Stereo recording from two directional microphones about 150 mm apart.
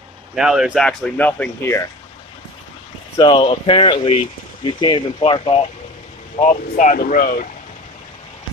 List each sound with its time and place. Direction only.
0.4 s speech: 5° right (ahead or behind)
0.8 s speech: 10° left (ahead or behind)
3.2 s speech: 30° left (ahead or behind)
6.4 s speech: 60° left (ahead or behind); by 7.4 s 75° left (ahead or behind)